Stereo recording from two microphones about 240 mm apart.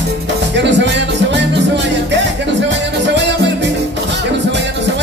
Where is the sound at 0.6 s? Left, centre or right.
Right.